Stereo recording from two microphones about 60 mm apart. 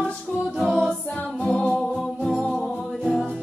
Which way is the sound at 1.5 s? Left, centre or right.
Centre.